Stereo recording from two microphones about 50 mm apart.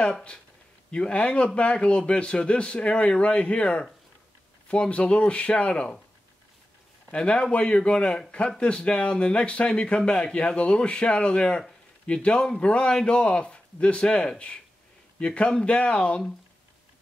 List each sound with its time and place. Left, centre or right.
0.9 s speech: centre
7.1 s speech: left